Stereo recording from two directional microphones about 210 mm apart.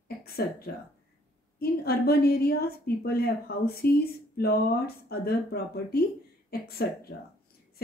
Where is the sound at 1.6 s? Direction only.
50° left (ahead or behind).